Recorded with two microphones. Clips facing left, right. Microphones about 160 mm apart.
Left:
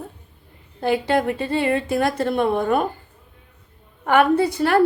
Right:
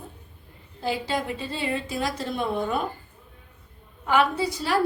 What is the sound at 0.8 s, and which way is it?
A woman's voice, 60° left (ahead or behind).